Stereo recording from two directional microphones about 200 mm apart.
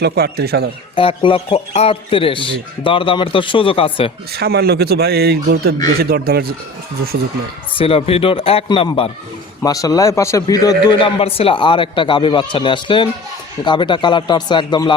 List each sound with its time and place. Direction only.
0.0 s speech: 50° right (ahead or behind)
0.9 s a man's voice: 25° left (ahead or behind)
4.3 s speech: 55° right (ahead or behind)
7.8 s a man's voice: 30° left (ahead or behind)